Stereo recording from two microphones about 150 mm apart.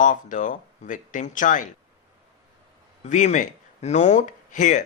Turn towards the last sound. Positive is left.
turn(degrees=55)  # may be behind; listen again after turning